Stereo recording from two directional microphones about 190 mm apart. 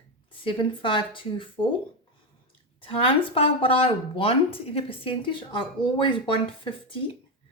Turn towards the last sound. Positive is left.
turn(degrees=25)  # may be behind; listen again after turning